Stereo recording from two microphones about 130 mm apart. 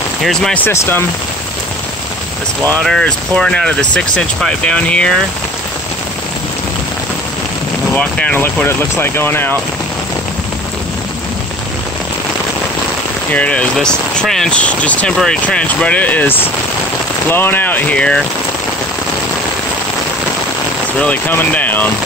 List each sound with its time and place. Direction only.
0.2 s speech: 5° left (ahead or behind)
0.7 s speech: 15° left (ahead or behind)
2.8 s speech: 5° left (ahead or behind)
7.9 s speech: 10° left (ahead or behind)
13.3 s speech: 10° left (ahead or behind)
21.0 s speech: 15° left (ahead or behind)